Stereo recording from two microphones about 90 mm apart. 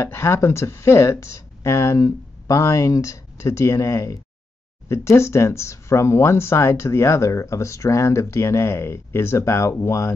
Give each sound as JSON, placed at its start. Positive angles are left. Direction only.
{"t": 0.0, "sound": "speech", "side_deg": 30}